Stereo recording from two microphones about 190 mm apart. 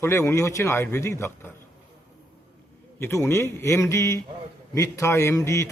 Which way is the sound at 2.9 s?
15° left (ahead or behind).